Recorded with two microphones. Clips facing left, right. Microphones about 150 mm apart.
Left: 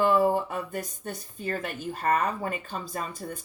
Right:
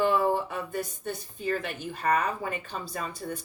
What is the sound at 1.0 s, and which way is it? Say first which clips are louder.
A woman's voice: right 2 dB; 45° left (ahead or behind).